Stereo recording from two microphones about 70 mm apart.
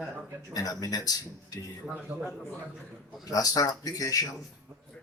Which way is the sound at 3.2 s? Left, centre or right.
Left.